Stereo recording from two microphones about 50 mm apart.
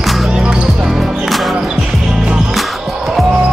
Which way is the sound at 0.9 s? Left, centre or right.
Centre.